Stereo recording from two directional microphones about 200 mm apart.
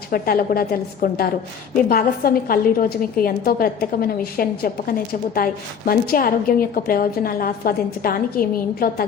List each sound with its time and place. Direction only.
0.1 s a woman's voice: 45° left (ahead or behind)